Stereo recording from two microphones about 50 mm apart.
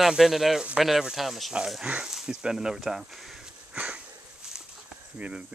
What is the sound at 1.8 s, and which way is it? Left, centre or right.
Speech, right.